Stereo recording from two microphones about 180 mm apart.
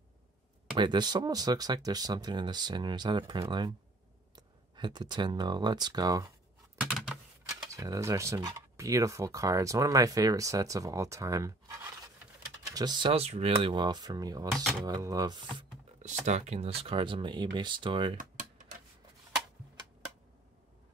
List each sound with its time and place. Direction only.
0.7 s speech: 25° right (ahead or behind)
7.1 s typing: 5° right (ahead or behind)
7.4 s speech: 20° right (ahead or behind)
14.5 s speech: centre (ahead or behind)
14.9 s speech: 20° right (ahead or behind)
16.0 s speech: 40° right (ahead or behind)
18.1 s computer keyboard: 45° right (ahead or behind)